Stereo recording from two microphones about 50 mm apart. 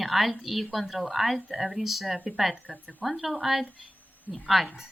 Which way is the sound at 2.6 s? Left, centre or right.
Right.